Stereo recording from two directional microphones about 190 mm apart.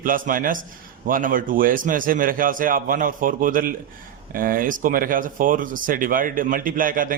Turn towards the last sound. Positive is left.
turn(degrees=-45)  # may be behind; listen again after turning